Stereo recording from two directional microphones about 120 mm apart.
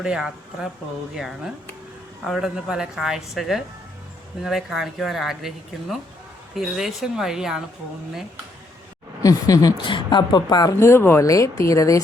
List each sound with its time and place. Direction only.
0.0 s speech: 5° right (ahead or behind)
9.2 s a woman's voice: 30° left (ahead or behind)